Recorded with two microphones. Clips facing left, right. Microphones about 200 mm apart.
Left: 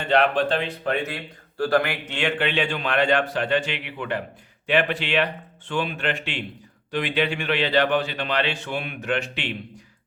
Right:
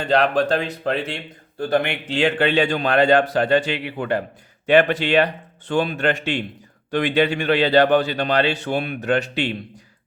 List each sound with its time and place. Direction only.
0.0 s speech: 40° right (ahead or behind)